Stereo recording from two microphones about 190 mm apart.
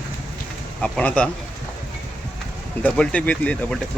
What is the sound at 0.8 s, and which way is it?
Speech, 5° left (ahead or behind).